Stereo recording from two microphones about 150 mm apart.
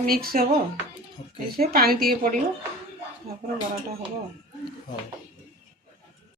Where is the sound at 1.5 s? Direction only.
85° right.